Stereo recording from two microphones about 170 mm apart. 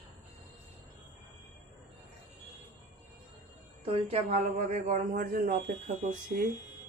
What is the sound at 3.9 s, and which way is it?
Speech, 35° right (ahead or behind).